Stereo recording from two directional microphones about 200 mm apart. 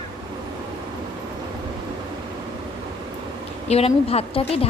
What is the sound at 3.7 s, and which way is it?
Speech, 30° left (ahead or behind).